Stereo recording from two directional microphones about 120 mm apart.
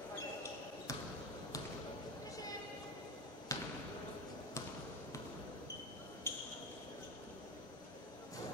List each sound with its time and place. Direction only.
3.5 s basketball bounce: 25° left (ahead or behind)
6.3 s basketball bounce: 20° left (ahead or behind)